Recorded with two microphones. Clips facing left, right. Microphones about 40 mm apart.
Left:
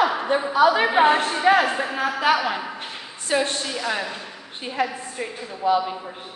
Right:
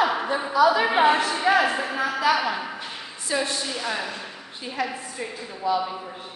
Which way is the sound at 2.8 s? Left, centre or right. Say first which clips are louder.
Left 1 dB; left.